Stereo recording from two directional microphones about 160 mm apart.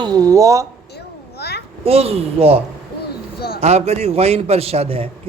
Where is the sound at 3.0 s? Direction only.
80° left.